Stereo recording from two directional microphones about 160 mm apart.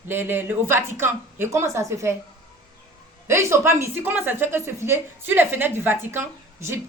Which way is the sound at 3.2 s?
15° right (ahead or behind).